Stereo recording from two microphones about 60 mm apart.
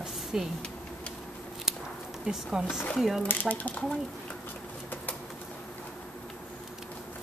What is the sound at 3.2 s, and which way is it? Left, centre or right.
Speech, left.